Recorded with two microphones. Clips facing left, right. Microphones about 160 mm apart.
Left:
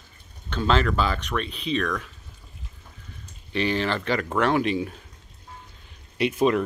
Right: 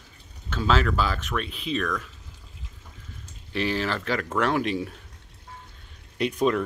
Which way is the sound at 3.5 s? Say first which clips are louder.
Left 2 dB; centre (ahead or behind).